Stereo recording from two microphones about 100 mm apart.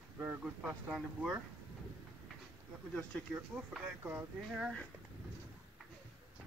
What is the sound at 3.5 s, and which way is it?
Speech, 20° right (ahead or behind).